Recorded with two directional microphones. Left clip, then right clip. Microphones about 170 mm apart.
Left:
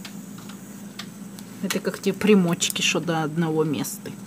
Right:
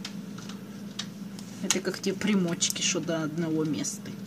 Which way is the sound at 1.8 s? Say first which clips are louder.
Left 7 dB; 50° left (ahead or behind).